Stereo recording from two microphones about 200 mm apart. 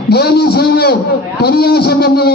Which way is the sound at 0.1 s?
50° left (ahead or behind).